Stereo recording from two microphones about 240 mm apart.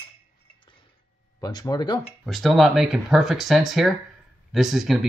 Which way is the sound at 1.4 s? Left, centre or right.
Centre.